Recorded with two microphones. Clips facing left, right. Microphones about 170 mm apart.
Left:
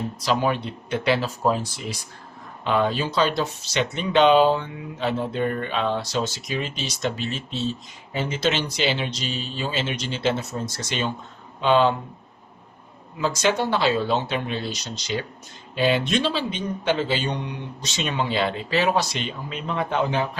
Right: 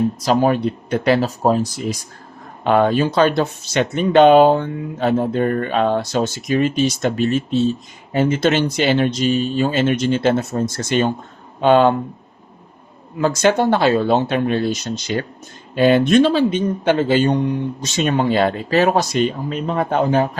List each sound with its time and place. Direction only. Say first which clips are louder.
0.2 s speech: right 4 dB; 45° right (ahead or behind)
2.6 s speech: right 7 dB; 55° right (ahead or behind)
13.1 s speech: right 7 dB; 50° right (ahead or behind)